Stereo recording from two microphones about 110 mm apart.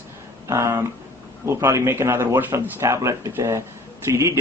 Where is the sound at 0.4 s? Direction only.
25° right (ahead or behind).